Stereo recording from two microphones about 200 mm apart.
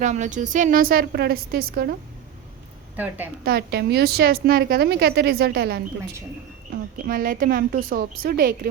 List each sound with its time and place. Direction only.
0.0 s a woman's voice: 35° right (ahead or behind)
2.9 s a woman's voice: 10° right (ahead or behind)
3.4 s a woman's voice: 50° right (ahead or behind)
7.0 s a woman's voice: 45° right (ahead or behind)